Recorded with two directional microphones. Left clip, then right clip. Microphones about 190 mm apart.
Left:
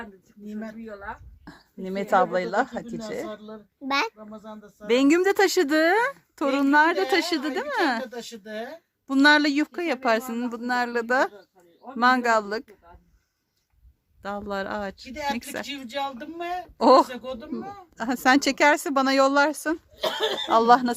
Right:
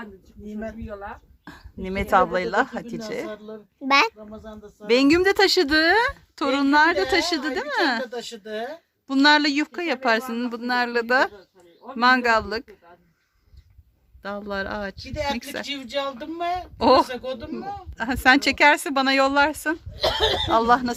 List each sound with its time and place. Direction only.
0.4 s speech: centre (ahead or behind)
0.9 s speech: 15° left (ahead or behind)
3.4 s a child's voice: 10° right (ahead or behind)
4.2 s speech: 10° left (ahead or behind)
8.0 s speech: 35° left (ahead or behind)
9.0 s speech: 10° left (ahead or behind)
14.2 s speech: 5° left (ahead or behind)
15.1 s speech: 40° left (ahead or behind); by 17.1 s 25° left (ahead or behind)
17.2 s speech: 5° left (ahead or behind)
17.9 s speech: 20° left (ahead or behind)
20.0 s speech: centre (ahead or behind)
20.5 s speech: 25° left (ahead or behind)